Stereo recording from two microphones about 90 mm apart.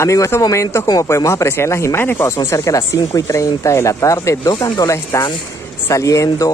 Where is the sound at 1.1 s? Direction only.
30° left (ahead or behind).